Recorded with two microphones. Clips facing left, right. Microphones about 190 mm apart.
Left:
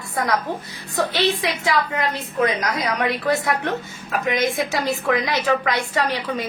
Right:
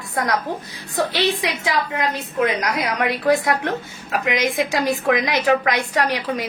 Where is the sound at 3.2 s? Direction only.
15° right (ahead or behind).